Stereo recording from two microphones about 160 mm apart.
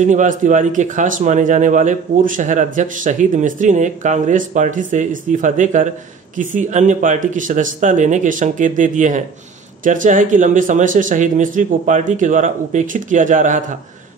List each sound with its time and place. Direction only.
0.0 s speech: 50° right (ahead or behind)